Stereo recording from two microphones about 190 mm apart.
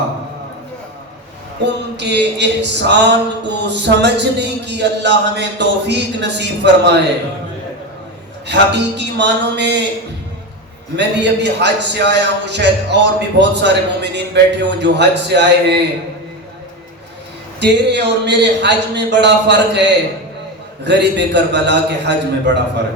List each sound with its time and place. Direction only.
1.6 s a man's voice: 65° right (ahead or behind)
8.4 s a man's voice: 65° right (ahead or behind)
10.9 s a man's voice: 65° right (ahead or behind)
17.6 s a man's voice: 65° right (ahead or behind)